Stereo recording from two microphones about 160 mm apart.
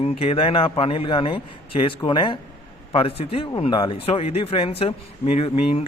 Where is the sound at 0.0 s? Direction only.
40° left (ahead or behind).